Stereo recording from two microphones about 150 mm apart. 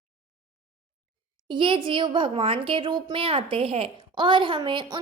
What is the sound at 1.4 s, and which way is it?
A woman's voice, 35° right (ahead or behind).